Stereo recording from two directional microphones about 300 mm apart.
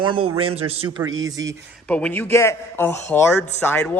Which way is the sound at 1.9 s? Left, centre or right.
Centre.